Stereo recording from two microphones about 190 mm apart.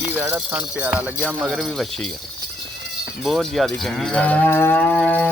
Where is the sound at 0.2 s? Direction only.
10° right (ahead or behind).